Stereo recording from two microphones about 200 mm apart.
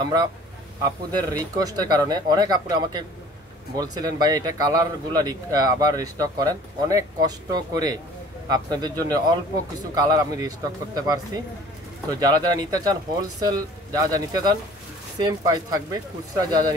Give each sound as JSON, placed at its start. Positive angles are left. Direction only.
{"t": 0.0, "sound": "speech", "side_deg": -20}